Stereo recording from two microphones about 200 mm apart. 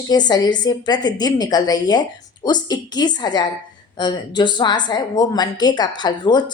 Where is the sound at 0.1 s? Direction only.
20° left (ahead or behind).